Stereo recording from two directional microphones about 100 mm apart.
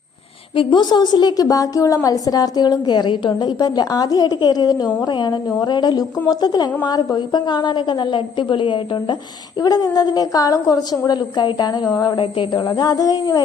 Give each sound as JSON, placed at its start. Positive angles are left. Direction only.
{"t": 0.5, "sound": "a woman's voice", "side_deg": 55}
{"t": 9.6, "sound": "a woman's voice", "side_deg": 40}
{"t": 12.6, "sound": "a woman's voice", "side_deg": 45}